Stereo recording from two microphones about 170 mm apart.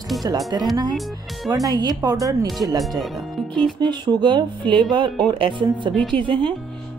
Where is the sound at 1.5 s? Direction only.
20° right (ahead or behind).